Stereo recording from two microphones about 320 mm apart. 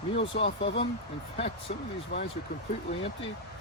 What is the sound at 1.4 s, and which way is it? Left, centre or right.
Speech, centre.